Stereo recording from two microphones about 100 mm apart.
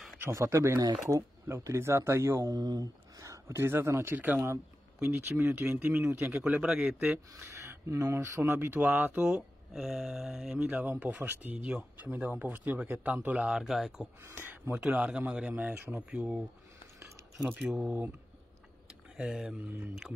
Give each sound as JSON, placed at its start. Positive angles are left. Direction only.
{"t": 0.2, "sound": "speech", "side_deg": -30}
{"t": 2.4, "sound": "speech", "side_deg": -40}
{"t": 5.0, "sound": "speech", "side_deg": -15}
{"t": 5.4, "sound": "speech", "side_deg": -25}
{"t": 6.4, "sound": "speech", "side_deg": -10}
{"t": 7.9, "sound": "speech", "side_deg": -30}
{"t": 9.3, "sound": "speech", "side_deg": -5}
{"t": 14.3, "sound": "speech", "side_deg": -20}
{"t": 14.8, "sound": "speech", "side_deg": -10}
{"t": 17.6, "sound": "speech", "side_deg": -5}
{"t": 19.1, "sound": "speech", "side_deg": -5}